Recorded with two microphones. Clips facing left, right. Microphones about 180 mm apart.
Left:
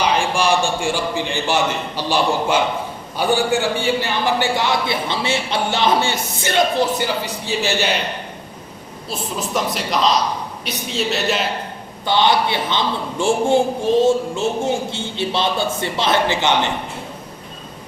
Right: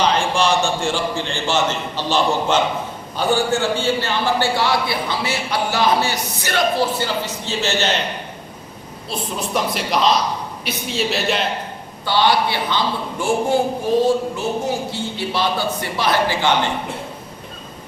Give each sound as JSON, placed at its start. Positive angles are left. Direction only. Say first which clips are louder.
{"t": 0.0, "sound": "a man's voice", "louder": "even", "side_deg": 10}
{"t": 9.0, "sound": "a woman's voice", "louder": "even", "side_deg": 0}
{"t": 12.0, "sound": "a man's voice", "louder": "left 1 dB", "side_deg": 20}